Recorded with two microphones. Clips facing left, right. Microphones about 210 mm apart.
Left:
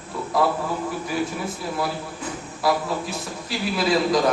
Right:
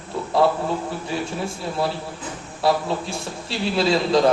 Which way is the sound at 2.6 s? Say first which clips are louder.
Right 2 dB; 30° right (ahead or behind).